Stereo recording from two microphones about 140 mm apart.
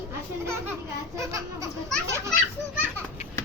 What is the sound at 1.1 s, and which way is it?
Speech, 20° right (ahead or behind).